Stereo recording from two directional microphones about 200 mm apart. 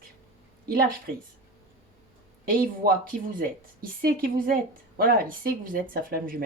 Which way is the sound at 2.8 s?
50° right (ahead or behind).